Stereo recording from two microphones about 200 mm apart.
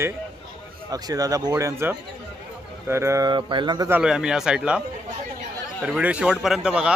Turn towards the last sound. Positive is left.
turn(degrees=-5)  # may be behind; listen again after turning